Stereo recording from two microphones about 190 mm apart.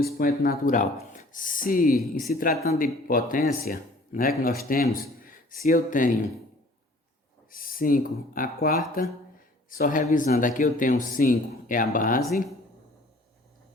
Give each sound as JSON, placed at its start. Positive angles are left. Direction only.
{"t": 0.0, "sound": "speech", "side_deg": 50}
{"t": 7.5, "sound": "speech", "side_deg": 45}